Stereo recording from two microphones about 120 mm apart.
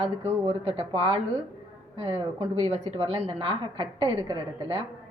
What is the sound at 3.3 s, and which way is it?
Speech, 45° right (ahead or behind).